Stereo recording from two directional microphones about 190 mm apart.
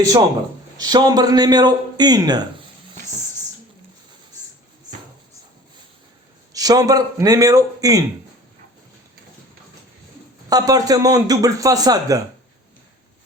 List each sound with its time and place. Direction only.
0.8 s a man's voice: 20° right (ahead or behind)
6.5 s a man's voice: 20° right (ahead or behind)
10.5 s a man's voice: 20° right (ahead or behind)